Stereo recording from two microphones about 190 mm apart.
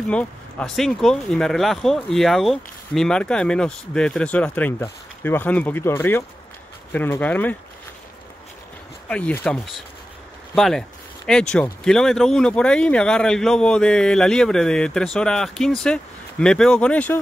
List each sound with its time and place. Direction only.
0.1 s speech: 5° left (ahead or behind)
9.1 s speech: 5° left (ahead or behind)